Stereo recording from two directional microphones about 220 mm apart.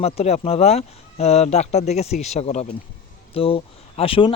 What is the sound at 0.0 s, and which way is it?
Speech, 30° left (ahead or behind).